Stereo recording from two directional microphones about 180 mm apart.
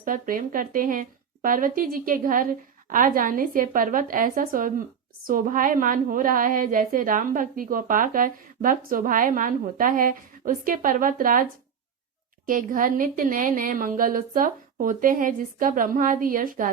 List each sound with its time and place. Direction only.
0.0 s a woman's voice: 50° right (ahead or behind)
12.5 s a woman's voice: 50° right (ahead or behind)